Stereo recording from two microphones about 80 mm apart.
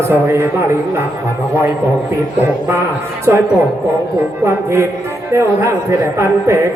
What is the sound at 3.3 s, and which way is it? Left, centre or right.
A man's voice, right.